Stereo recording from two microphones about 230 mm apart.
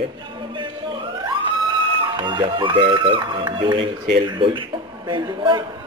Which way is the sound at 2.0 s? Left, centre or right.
Centre.